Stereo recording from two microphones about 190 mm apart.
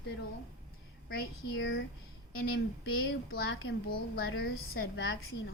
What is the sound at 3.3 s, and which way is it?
A woman's voice, 60° left (ahead or behind).